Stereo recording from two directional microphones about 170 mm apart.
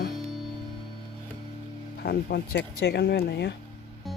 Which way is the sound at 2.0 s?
70° left (ahead or behind).